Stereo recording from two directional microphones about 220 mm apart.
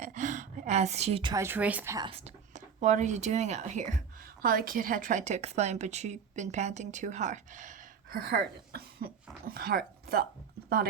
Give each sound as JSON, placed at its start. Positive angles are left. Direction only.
{"t": 0.0, "sound": "a woman's voice", "side_deg": -35}
{"t": 2.0, "sound": "a woman's voice", "side_deg": -30}